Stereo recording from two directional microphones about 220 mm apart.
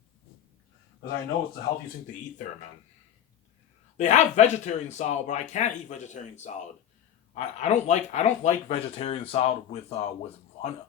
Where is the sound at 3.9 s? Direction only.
30° left (ahead or behind).